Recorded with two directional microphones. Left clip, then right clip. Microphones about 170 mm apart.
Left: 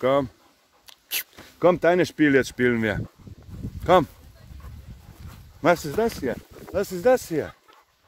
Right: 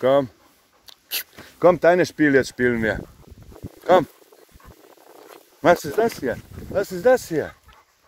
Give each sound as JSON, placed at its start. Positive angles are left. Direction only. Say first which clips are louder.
{"t": 0.0, "sound": "speech", "louder": "right 4 dB", "side_deg": 10}
{"t": 0.8, "sound": "a sound", "louder": "right 1 dB", "side_deg": 15}
{"t": 1.6, "sound": "speech", "louder": "right 3 dB", "side_deg": 20}
{"t": 5.6, "sound": "speech", "louder": "right 4 dB", "side_deg": 0}
{"t": 6.7, "sound": "speech", "louder": "right 3 dB", "side_deg": 20}
{"t": 7.2, "sound": "speech", "louder": "right 2 dB", "side_deg": 10}